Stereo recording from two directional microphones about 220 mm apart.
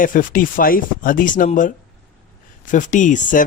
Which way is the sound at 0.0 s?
40° left (ahead or behind).